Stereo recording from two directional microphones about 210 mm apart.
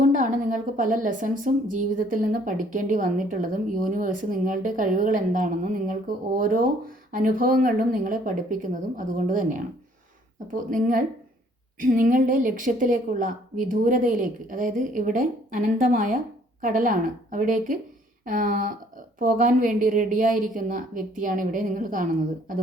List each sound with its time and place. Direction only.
0.0 s speech: 40° right (ahead or behind)